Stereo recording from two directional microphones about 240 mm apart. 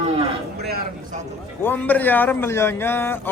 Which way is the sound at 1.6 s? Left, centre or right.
Centre.